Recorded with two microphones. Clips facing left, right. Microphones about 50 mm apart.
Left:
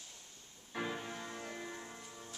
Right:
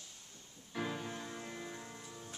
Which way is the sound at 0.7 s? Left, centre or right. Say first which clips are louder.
Even; centre.